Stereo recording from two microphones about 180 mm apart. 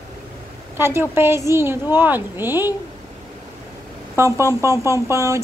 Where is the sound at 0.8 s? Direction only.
15° right (ahead or behind).